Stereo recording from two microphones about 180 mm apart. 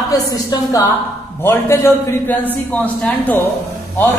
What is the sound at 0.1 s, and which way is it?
A woman's voice, 20° left (ahead or behind).